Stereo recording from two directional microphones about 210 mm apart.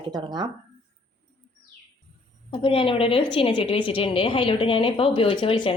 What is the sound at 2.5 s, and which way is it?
A woman's voice, 25° left (ahead or behind).